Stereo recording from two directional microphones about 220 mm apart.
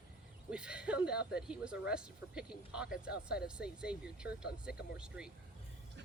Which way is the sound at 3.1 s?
45° left (ahead or behind).